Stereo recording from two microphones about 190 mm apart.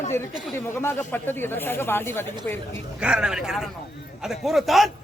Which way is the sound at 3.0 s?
5° right (ahead or behind).